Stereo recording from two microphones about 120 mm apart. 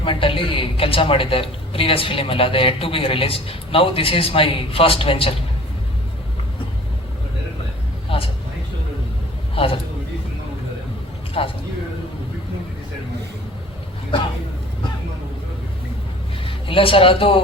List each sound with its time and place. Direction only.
0.0 s a woman's voice: 45° left (ahead or behind)
8.1 s vehicle: 50° left (ahead or behind)
9.6 s a woman's voice: 50° left (ahead or behind)
11.4 s a woman's voice: 50° left (ahead or behind)
16.5 s a man's voice: 50° left (ahead or behind)